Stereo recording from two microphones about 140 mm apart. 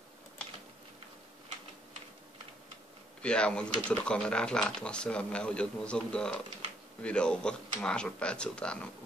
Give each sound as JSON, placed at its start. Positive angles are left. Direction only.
{"t": 3.2, "sound": "speech", "side_deg": 5}